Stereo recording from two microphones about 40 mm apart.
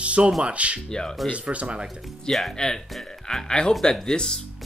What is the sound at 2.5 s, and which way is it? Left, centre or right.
Speech, centre.